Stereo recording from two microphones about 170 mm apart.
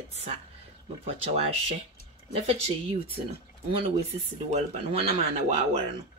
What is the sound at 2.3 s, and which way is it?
Speech, 35° right (ahead or behind).